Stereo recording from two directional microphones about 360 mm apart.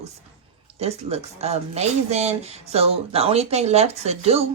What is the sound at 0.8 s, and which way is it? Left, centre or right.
Speech, centre.